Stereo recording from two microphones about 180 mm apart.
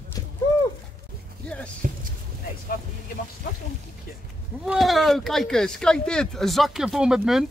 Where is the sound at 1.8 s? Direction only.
50° right (ahead or behind).